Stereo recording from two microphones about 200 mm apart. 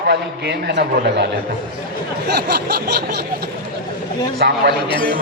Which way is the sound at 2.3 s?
55° right (ahead or behind).